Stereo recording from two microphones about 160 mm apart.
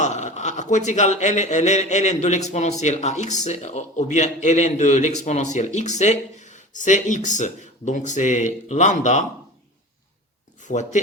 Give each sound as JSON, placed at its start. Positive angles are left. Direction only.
{"t": 0.0, "sound": "speech", "side_deg": 50}
{"t": 10.6, "sound": "speech", "side_deg": 50}